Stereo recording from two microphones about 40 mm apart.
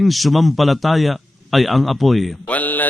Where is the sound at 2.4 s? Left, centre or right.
Left.